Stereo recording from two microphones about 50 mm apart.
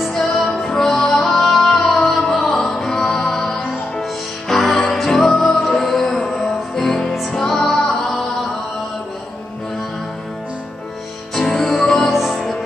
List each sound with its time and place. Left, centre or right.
0.0 s music: centre
2.1 s music: left
2.4 s music: centre
11.3 s music: centre
12.1 s music: centre